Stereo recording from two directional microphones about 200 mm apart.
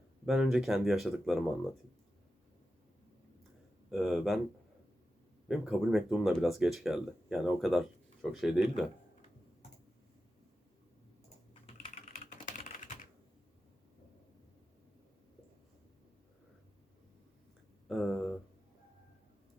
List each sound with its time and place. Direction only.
0.3 s speech: centre (ahead or behind)
3.9 s speech: centre (ahead or behind)
5.5 s speech: centre (ahead or behind)
11.6 s typing: 30° left (ahead or behind)
17.8 s a sound: centre (ahead or behind)